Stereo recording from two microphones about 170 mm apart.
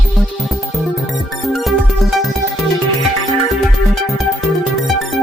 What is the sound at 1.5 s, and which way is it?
Music, centre (ahead or behind).